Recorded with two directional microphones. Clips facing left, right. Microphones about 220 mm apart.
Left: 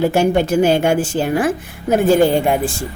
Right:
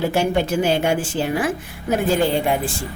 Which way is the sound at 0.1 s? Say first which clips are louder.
Left 5 dB; 45° left (ahead or behind).